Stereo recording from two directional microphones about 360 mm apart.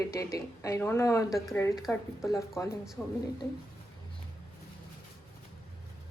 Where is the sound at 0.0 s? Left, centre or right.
Centre.